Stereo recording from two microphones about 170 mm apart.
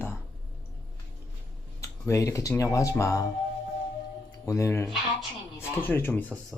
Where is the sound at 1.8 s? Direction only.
15° left (ahead or behind).